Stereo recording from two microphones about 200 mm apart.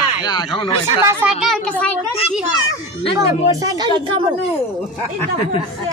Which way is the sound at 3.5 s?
20° right (ahead or behind).